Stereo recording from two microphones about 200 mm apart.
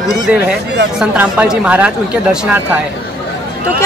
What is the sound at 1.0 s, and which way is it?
Speech, 5° right (ahead or behind).